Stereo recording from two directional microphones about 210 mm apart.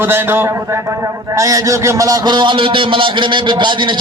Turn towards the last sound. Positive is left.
turn(degrees=-20)  # may be behind; listen again after turning